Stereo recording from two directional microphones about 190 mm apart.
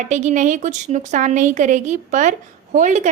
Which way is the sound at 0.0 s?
40° right (ahead or behind).